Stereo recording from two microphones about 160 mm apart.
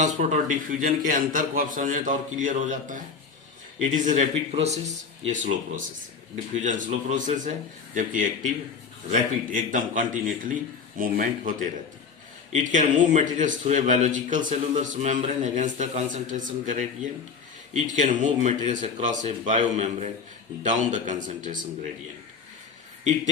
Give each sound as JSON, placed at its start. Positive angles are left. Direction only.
{"t": 0.0, "sound": "a man's voice", "side_deg": -50}